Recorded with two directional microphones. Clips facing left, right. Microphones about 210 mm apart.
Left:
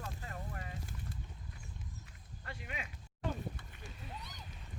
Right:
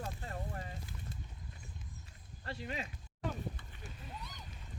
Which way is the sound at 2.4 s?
30° right (ahead or behind).